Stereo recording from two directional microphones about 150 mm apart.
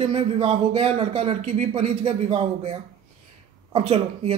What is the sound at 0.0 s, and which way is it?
Speech, 40° right (ahead or behind).